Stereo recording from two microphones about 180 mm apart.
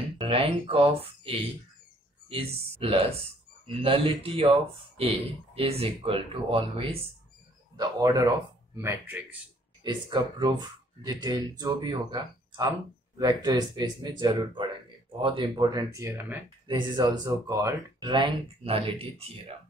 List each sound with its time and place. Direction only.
0.2 s speech: 30° right (ahead or behind)
7.7 s speech: 20° right (ahead or behind)
9.8 s speech: 25° right (ahead or behind)
16.6 s speech: 25° right (ahead or behind)